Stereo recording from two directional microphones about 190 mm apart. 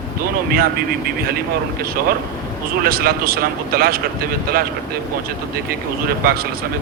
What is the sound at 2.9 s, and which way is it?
Speech, 50° right (ahead or behind).